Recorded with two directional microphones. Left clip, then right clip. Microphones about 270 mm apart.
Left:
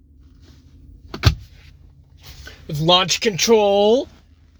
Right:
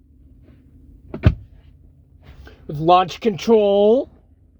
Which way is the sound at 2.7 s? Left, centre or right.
Centre.